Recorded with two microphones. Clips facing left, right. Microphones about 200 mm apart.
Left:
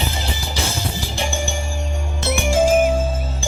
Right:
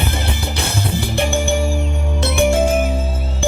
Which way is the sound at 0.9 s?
60° right (ahead or behind).